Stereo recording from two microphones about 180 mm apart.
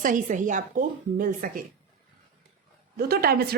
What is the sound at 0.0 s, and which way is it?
Speech, 45° right (ahead or behind).